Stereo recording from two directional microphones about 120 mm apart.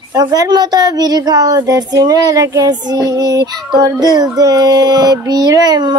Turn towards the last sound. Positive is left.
turn(degrees=-35)  # may be behind; listen again after turning